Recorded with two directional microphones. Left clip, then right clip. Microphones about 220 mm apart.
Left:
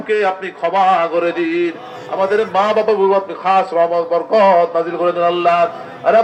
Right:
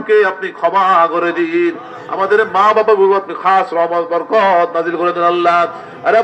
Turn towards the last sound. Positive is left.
turn(degrees=-50)  # may be behind; listen again after turning